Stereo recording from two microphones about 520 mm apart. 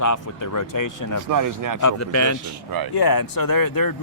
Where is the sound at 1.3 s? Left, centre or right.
Right.